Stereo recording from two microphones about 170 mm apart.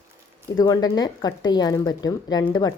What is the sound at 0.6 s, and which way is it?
Speech, 25° left (ahead or behind).